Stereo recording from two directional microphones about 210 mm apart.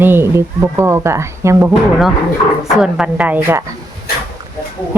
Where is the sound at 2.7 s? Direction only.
5° right (ahead or behind).